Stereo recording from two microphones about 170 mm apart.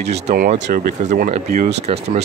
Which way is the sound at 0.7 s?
60° right (ahead or behind).